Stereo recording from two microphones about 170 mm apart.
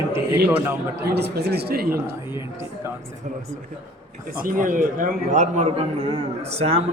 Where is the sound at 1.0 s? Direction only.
70° right (ahead or behind).